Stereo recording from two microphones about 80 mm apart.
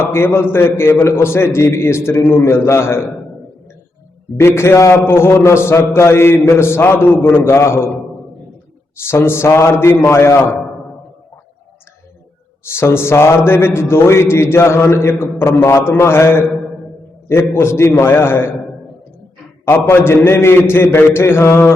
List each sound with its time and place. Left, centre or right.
0.0 s a man's voice: left
4.4 s a man's voice: left
9.0 s a man's voice: left
12.6 s a man's voice: left
19.6 s a man's voice: left